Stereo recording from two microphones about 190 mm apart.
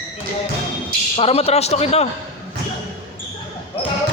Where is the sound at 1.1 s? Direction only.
30° left (ahead or behind).